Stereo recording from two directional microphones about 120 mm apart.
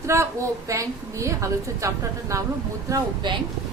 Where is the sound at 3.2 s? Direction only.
40° right (ahead or behind).